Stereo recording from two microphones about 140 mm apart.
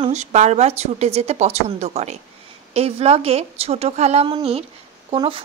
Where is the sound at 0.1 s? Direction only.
55° right (ahead or behind).